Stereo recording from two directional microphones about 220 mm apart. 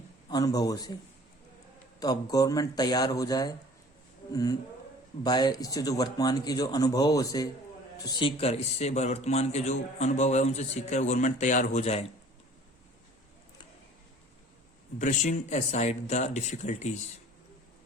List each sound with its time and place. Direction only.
0.3 s speech: 20° left (ahead or behind)
2.0 s speech: 15° left (ahead or behind)
14.9 s speech: 35° left (ahead or behind)